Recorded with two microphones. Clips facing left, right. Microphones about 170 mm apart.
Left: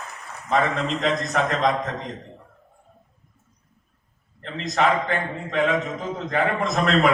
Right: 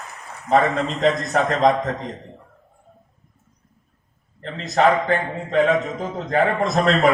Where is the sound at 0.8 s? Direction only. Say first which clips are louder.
Right 4 dB; centre (ahead or behind).